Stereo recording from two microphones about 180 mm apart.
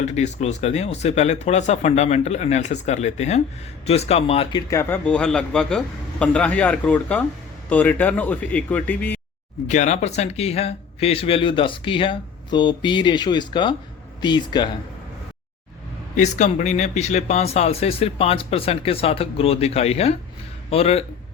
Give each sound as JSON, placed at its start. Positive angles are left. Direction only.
{"t": 0.0, "sound": "speech", "side_deg": 40}
{"t": 4.7, "sound": "a man's voice", "side_deg": 10}
{"t": 9.6, "sound": "speech", "side_deg": 40}
{"t": 16.1, "sound": "speech", "side_deg": 40}